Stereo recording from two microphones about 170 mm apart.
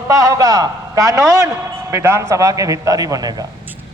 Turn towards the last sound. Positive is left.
turn(degrees=-20)  # may be behind; listen again after turning